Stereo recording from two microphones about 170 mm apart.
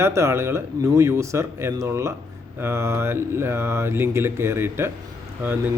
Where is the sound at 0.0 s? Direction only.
15° right (ahead or behind).